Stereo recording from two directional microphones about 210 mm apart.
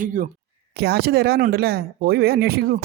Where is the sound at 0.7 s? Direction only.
50° right (ahead or behind).